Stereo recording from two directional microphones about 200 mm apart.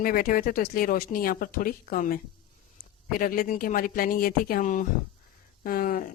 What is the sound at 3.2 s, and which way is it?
Speech, 45° left (ahead or behind).